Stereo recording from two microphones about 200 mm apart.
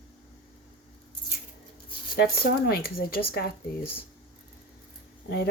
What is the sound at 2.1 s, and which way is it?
Speech, 50° left (ahead or behind).